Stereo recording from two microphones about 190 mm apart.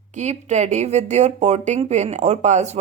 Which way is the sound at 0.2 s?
35° right (ahead or behind).